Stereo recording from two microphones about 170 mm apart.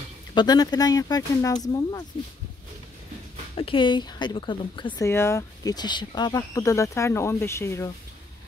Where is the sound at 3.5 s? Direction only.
30° left (ahead or behind).